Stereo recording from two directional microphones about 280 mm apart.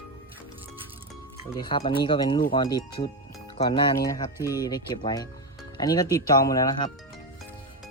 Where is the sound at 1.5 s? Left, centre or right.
Centre.